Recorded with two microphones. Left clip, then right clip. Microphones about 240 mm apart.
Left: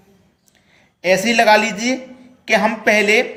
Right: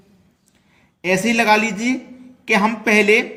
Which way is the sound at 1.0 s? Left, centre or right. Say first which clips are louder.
Left 3 dB; right.